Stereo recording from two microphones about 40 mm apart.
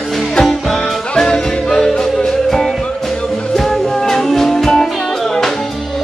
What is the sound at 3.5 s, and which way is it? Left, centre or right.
Music, centre.